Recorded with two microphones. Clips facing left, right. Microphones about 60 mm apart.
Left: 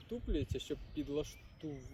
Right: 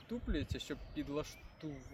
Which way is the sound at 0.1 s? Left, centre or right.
Right.